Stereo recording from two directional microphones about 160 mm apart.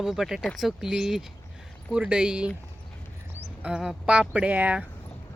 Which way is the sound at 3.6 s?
5° right (ahead or behind).